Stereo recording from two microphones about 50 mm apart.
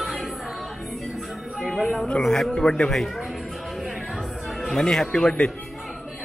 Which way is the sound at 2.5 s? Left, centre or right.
Centre.